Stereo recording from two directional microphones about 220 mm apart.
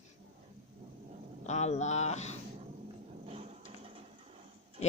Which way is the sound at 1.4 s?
30° left (ahead or behind).